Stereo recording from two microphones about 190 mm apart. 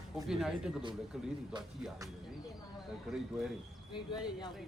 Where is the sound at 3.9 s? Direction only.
20° left (ahead or behind).